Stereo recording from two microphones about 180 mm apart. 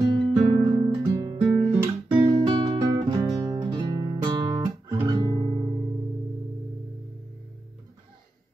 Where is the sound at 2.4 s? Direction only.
25° right (ahead or behind).